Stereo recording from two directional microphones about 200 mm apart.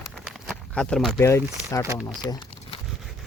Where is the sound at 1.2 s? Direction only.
15° left (ahead or behind).